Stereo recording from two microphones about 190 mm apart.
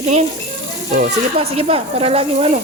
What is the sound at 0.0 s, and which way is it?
Speech, 35° right (ahead or behind).